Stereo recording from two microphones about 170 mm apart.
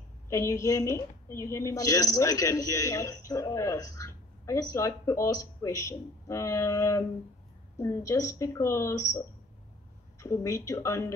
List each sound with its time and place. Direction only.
0.3 s a woman's voice: 15° left (ahead or behind)
10.2 s a woman's voice: 20° left (ahead or behind)